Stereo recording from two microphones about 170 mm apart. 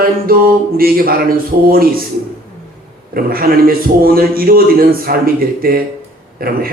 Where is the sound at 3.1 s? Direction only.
60° right (ahead or behind).